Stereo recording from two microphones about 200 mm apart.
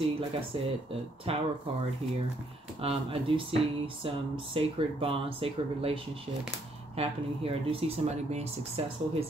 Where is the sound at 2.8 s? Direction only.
30° right (ahead or behind).